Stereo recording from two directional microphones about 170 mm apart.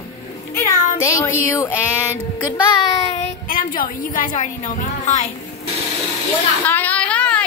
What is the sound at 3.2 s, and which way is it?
A woman's voice, 55° left (ahead or behind).